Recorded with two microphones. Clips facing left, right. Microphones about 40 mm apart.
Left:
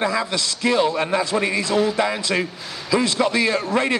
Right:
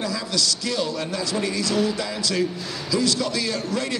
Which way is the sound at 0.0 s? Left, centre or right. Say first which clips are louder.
Left 4 dB; left.